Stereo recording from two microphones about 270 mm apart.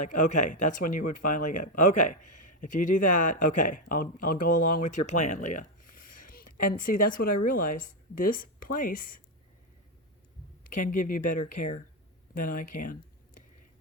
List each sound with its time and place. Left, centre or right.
0.0 s speech: left
10.7 s speech: left